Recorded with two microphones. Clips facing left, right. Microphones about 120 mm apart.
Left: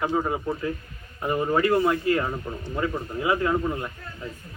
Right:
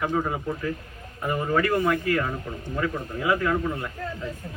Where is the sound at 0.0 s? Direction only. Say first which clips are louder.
Left 1 dB; 15° left (ahead or behind).